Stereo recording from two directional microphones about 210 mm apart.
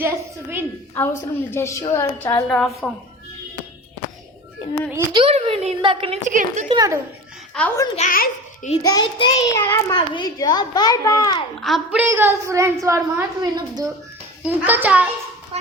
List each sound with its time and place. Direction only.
0.9 s a child's voice: 10° left (ahead or behind)
4.9 s a woman's voice: 10° right (ahead or behind)
5.2 s a woman's voice: 30° right (ahead or behind)
6.7 s a woman's voice: 15° right (ahead or behind)
7.6 s a woman's voice: 5° left (ahead or behind)
7.9 s a child's voice: 40° left (ahead or behind)
8.8 s a child's voice: 20° left (ahead or behind)
11.6 s a woman's voice: 5° right (ahead or behind)
14.4 s a woman's voice: 5° right (ahead or behind)